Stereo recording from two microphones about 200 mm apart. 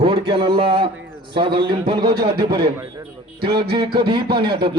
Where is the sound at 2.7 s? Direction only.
10° right (ahead or behind).